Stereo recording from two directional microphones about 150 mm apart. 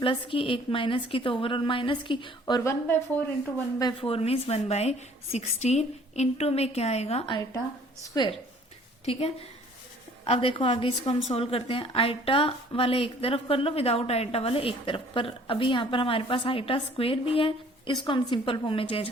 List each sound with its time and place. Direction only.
0.0 s a woman's voice: 35° left (ahead or behind)
2.6 s speech: 15° left (ahead or behind)
4.0 s a woman's voice: 40° left (ahead or behind)
8.0 s a woman's voice: 25° left (ahead or behind)
10.2 s a woman's voice: 40° left (ahead or behind)